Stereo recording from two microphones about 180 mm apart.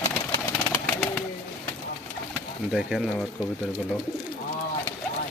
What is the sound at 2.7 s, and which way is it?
Speech, 5° right (ahead or behind).